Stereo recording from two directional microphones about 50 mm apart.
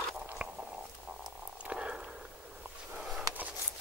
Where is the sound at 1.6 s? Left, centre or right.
Centre.